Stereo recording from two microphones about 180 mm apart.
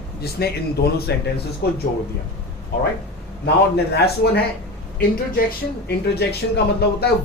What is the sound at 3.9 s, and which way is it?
Speech, 65° left (ahead or behind).